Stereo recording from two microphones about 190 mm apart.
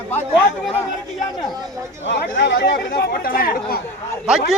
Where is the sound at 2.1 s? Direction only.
70° left (ahead or behind).